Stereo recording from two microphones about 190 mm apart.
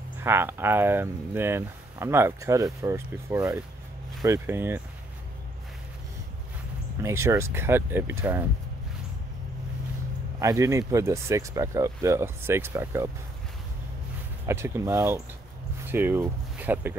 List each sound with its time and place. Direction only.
0.2 s speech: 10° right (ahead or behind)
7.0 s speech: 15° right (ahead or behind)
10.4 s speech: 15° right (ahead or behind)
14.4 s speech: 15° right (ahead or behind)